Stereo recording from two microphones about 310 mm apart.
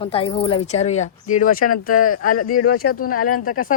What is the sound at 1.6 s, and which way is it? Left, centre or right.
Speech, left.